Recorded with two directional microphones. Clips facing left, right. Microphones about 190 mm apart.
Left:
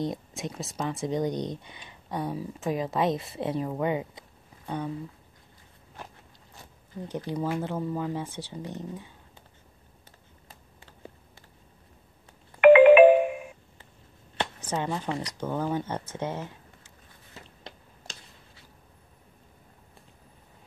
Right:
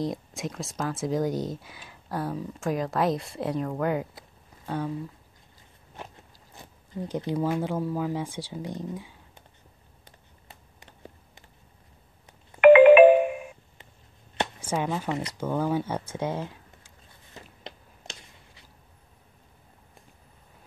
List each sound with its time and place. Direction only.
0.0 s speech: centre (ahead or behind)
6.5 s a sound: 20° right (ahead or behind)
7.3 s speech: 5° right (ahead or behind)
10.8 s computer keyboard: 20° right (ahead or behind)
12.5 s ringtone: 50° right (ahead or behind)
14.4 s a sound: 10° right (ahead or behind)